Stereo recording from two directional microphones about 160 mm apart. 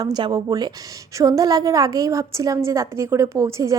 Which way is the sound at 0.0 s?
25° right (ahead or behind).